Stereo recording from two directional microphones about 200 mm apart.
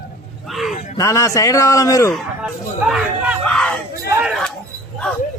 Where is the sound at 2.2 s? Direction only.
Centre (ahead or behind).